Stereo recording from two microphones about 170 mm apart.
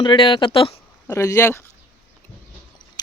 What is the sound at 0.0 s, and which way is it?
Speech, 30° left (ahead or behind).